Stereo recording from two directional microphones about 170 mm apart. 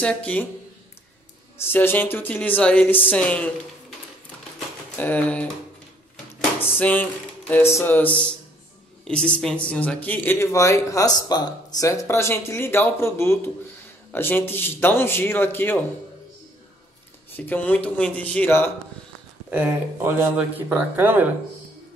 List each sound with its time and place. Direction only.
0.0 s speech: 5° left (ahead or behind)
1.6 s speech: 10° left (ahead or behind)
4.9 s speech: 10° left (ahead or behind)
6.8 s speech: 10° left (ahead or behind)
17.4 s speech: 10° left (ahead or behind)
19.5 s speech: 10° right (ahead or behind)